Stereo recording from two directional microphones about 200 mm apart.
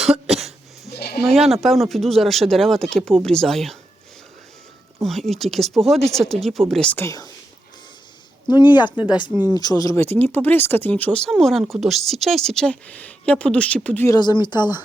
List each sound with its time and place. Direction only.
0.0 s cough: centre (ahead or behind)
0.9 s sheep: 50° left (ahead or behind)
1.2 s speech: centre (ahead or behind)
5.0 s speech: centre (ahead or behind)
8.4 s speech: 20° left (ahead or behind)